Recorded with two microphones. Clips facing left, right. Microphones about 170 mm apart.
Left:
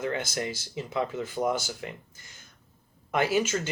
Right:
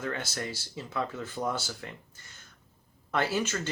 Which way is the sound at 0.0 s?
15° left (ahead or behind).